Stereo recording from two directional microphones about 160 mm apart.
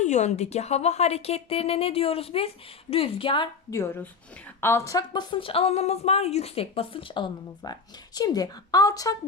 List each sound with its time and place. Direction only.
0.0 s speech: 45° left (ahead or behind)
3.7 s speech: 15° left (ahead or behind)